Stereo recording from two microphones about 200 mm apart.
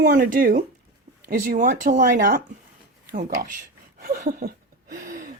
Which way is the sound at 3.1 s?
40° right (ahead or behind).